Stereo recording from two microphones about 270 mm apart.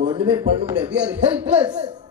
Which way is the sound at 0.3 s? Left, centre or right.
Centre.